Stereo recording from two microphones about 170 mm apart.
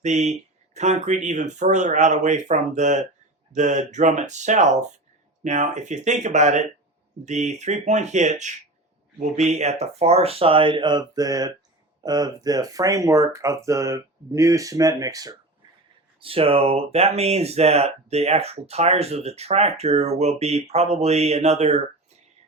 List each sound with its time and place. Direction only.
0.0 s speech: 45° right (ahead or behind); by 15.4 s 20° right (ahead or behind)
16.2 s speech: 35° right (ahead or behind)